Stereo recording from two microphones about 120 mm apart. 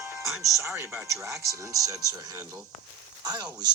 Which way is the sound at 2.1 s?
30° right (ahead or behind).